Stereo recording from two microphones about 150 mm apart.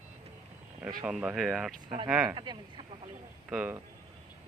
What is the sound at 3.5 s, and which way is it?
Speech, 10° right (ahead or behind).